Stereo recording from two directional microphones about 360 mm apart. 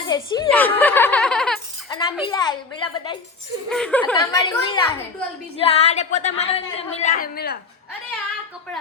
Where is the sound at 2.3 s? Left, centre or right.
Centre.